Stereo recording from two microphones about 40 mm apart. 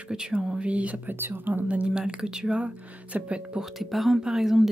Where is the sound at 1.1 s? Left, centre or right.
Right.